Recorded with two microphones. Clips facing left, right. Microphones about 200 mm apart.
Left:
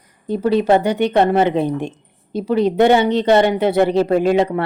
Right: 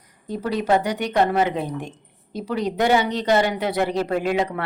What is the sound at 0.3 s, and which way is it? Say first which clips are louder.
A woman's voice: left 7 dB; 25° left (ahead or behind).